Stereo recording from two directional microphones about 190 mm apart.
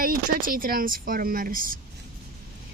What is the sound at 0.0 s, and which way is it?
Speech, 50° right (ahead or behind).